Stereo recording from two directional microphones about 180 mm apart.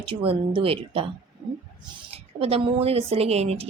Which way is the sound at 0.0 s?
30° right (ahead or behind).